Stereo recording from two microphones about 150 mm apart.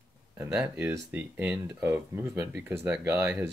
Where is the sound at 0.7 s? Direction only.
15° right (ahead or behind).